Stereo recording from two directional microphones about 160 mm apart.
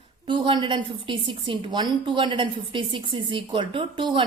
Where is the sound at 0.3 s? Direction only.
30° right (ahead or behind).